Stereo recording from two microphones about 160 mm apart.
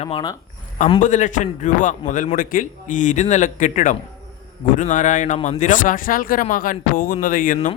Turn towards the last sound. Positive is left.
turn(degrees=60)  # may be behind; listen again after turning